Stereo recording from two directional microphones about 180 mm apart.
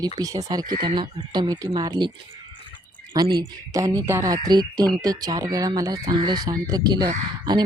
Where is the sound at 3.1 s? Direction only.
25° right (ahead or behind).